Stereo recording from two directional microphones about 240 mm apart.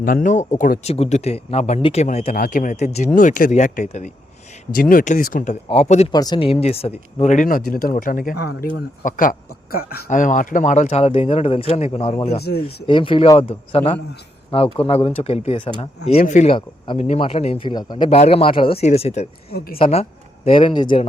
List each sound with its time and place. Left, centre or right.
0.0 s speech: left
12.4 s speech: left
12.9 s speech: left
19.5 s speech: left
19.8 s speech: left